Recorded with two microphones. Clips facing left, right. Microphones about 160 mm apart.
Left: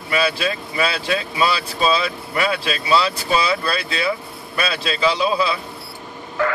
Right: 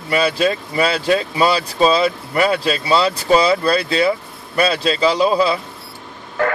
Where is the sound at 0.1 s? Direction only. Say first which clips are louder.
Right 4 dB; 35° right (ahead or behind).